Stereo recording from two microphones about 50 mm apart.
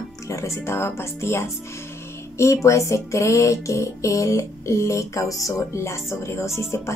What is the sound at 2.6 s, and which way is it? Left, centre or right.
Music, left.